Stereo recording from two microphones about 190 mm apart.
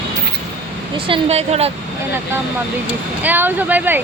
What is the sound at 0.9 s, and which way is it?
Speech, 30° right (ahead or behind).